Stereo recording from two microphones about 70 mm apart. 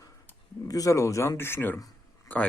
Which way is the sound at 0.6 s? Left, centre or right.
Left.